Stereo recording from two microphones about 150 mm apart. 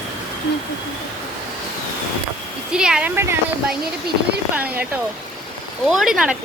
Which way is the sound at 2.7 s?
5° right (ahead or behind).